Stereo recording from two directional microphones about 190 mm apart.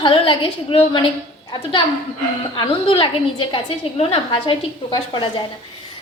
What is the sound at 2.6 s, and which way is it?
A woman's voice, 30° left (ahead or behind).